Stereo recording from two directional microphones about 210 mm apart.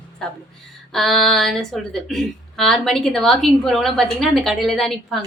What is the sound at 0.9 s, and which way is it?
A woman's voice, centre (ahead or behind).